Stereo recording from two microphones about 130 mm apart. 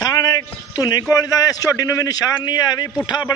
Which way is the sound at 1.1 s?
30° left (ahead or behind).